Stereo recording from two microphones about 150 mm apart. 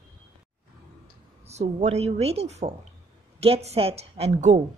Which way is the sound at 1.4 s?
45° right (ahead or behind).